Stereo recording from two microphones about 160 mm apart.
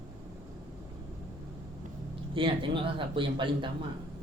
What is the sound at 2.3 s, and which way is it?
A man's voice, 30° right (ahead or behind).